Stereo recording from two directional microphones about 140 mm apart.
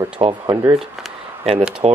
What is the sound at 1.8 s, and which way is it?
Speech, 50° right (ahead or behind).